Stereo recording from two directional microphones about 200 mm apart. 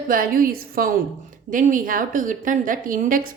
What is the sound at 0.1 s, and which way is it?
Speech, 45° right (ahead or behind).